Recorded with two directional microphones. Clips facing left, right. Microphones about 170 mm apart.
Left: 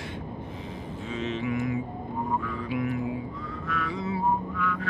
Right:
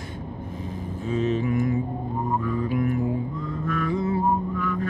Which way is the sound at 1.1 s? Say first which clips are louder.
Right 6 dB; 45° right (ahead or behind).